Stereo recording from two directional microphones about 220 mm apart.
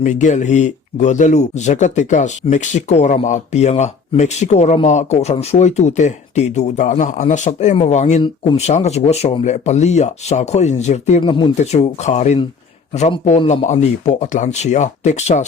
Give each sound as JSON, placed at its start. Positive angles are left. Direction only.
{"t": 0.0, "sound": "speech", "side_deg": 35}